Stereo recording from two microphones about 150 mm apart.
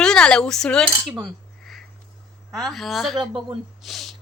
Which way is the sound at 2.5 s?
Centre (ahead or behind).